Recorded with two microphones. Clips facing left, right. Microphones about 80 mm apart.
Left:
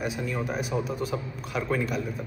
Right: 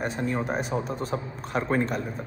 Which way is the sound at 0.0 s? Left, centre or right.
Right.